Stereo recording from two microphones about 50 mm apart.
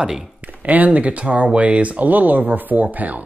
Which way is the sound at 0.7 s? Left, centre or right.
Right.